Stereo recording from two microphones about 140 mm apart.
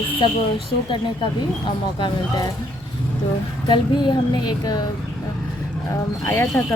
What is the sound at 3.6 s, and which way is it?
A woman's voice, 35° left (ahead or behind).